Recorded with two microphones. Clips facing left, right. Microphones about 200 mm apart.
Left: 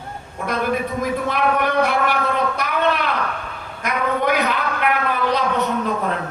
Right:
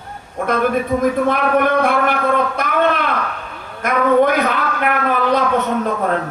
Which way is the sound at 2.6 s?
50° right (ahead or behind).